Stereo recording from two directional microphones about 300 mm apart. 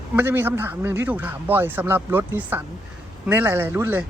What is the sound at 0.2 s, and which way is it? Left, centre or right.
A man's voice, centre.